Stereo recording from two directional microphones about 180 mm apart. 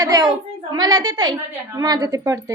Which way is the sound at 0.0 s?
20° right (ahead or behind).